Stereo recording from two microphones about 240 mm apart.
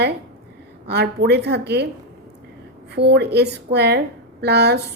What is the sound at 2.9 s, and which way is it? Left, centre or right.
A woman's voice, right.